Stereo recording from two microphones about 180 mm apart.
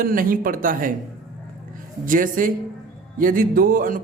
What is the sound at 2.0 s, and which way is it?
A man's voice, 50° right (ahead or behind).